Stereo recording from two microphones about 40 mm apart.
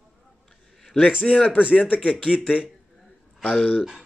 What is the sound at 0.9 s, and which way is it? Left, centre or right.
A man's voice, left.